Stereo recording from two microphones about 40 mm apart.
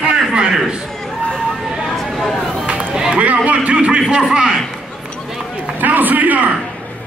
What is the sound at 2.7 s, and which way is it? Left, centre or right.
Run, right.